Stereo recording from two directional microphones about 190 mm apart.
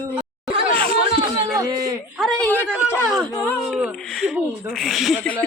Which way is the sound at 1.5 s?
20° right (ahead or behind).